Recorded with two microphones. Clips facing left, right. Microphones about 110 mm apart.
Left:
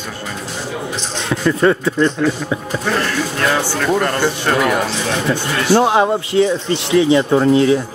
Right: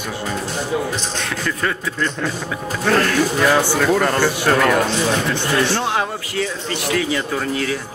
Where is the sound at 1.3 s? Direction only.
25° left (ahead or behind).